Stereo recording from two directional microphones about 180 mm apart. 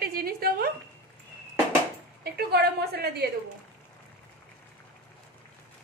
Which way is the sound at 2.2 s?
65° right (ahead or behind).